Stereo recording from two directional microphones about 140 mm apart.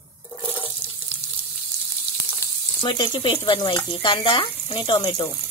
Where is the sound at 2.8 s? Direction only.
35° left (ahead or behind).